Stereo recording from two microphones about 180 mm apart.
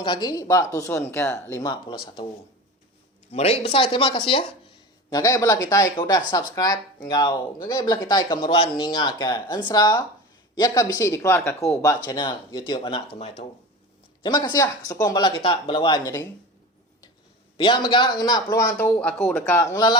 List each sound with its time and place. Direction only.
0.0 s speech: 25° left (ahead or behind)
3.3 s speech: 35° left (ahead or behind)
5.1 s speech: 20° left (ahead or behind)
14.4 s speech: 20° left (ahead or behind)
17.6 s speech: 25° left (ahead or behind)
18.8 s speech: 10° left (ahead or behind)
19.7 s speech: 25° left (ahead or behind)